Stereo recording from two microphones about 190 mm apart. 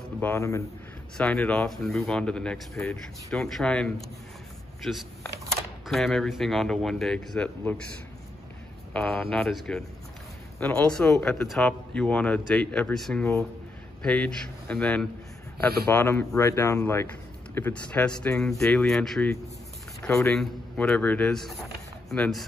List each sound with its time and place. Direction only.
0.2 s speech: 15° left (ahead or behind)
1.1 s speech: 5° left (ahead or behind)
8.9 s speech: centre (ahead or behind)